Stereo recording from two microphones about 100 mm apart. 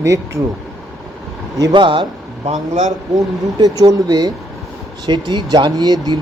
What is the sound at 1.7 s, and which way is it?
Speech, 55° right (ahead or behind).